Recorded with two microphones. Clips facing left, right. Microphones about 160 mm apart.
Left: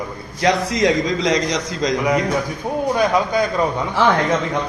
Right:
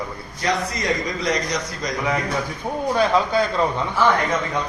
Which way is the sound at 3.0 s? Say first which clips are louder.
Even; 15° left (ahead or behind).